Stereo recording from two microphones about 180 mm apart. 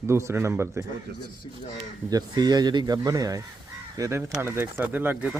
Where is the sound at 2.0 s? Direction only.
20° right (ahead or behind).